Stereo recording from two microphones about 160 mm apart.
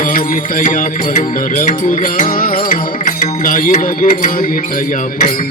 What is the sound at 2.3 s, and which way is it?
Music, 65° left (ahead or behind).